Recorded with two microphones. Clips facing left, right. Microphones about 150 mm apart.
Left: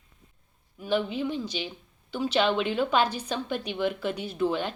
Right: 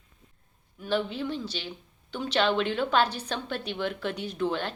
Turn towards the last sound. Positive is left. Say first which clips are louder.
# left 2 dB
turn(degrees=10)  # may be behind; listen again after turning